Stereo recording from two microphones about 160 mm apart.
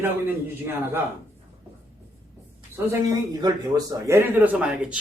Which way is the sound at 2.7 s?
20° right (ahead or behind).